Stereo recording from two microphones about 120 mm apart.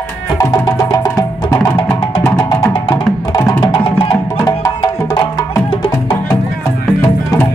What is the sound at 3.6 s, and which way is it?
Music, 40° left (ahead or behind).